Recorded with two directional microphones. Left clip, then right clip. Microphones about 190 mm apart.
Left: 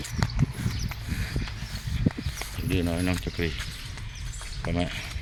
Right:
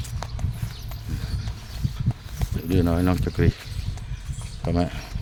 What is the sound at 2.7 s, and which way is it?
Speech, 35° right (ahead or behind).